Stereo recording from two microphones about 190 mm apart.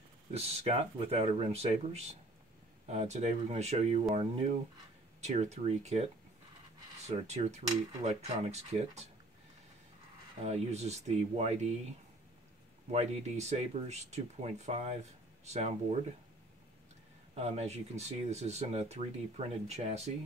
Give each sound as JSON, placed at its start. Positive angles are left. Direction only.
{"t": 0.3, "sound": "speech", "side_deg": -30}
{"t": 7.1, "sound": "speech", "side_deg": -35}
{"t": 10.4, "sound": "speech", "side_deg": -35}
{"t": 12.9, "sound": "speech", "side_deg": -35}
{"t": 17.3, "sound": "speech", "side_deg": -35}